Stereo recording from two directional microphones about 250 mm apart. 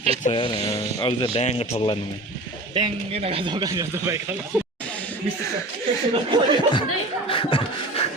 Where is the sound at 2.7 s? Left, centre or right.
Right.